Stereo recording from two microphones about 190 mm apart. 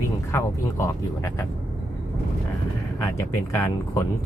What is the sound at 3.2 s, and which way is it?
Speech, 15° left (ahead or behind).